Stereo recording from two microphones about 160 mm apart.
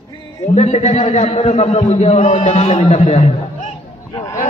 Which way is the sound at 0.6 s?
45° left (ahead or behind).